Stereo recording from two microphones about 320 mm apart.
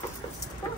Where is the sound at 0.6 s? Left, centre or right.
Centre.